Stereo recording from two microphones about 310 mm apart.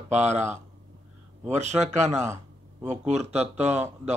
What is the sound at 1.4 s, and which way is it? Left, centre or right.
Speech, right.